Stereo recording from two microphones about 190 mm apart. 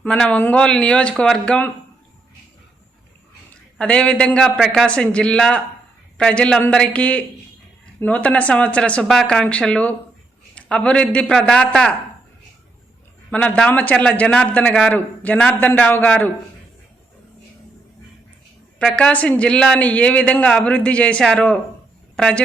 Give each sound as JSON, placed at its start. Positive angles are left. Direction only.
{"t": 0.0, "sound": "speech", "side_deg": 5}
{"t": 3.8, "sound": "a man's voice", "side_deg": 5}
{"t": 13.3, "sound": "a man's voice", "side_deg": 5}
{"t": 18.8, "sound": "a man's voice", "side_deg": 5}